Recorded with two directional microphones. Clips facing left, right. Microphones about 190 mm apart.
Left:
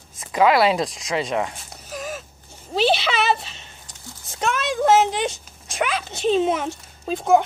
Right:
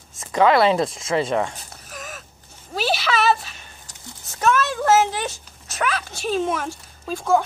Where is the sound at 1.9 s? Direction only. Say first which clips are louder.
Left 7 dB; 30° left (ahead or behind).